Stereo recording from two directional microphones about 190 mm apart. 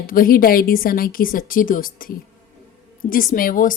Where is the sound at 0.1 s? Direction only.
50° left (ahead or behind).